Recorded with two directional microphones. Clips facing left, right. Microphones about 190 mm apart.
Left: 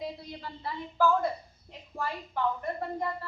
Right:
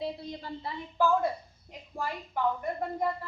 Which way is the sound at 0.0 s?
20° right (ahead or behind).